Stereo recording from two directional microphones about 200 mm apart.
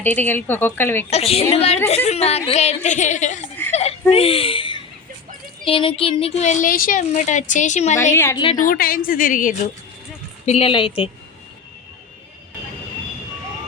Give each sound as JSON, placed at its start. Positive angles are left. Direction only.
{"t": 0.0, "sound": "a woman's voice", "side_deg": 10}
{"t": 1.1, "sound": "a woman's voice", "side_deg": 30}
{"t": 3.7, "sound": "a sound", "side_deg": 30}
{"t": 4.1, "sound": "a woman's voice", "side_deg": 30}
{"t": 8.1, "sound": "a woman's voice", "side_deg": 10}
{"t": 8.7, "sound": "a woman's voice", "side_deg": 45}
{"t": 10.4, "sound": "a woman's voice", "side_deg": 30}